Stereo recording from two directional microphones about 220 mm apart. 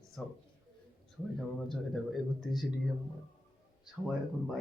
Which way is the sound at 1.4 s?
Centre (ahead or behind).